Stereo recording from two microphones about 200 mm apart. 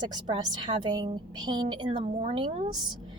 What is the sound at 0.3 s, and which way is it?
A woman's voice, 20° right (ahead or behind).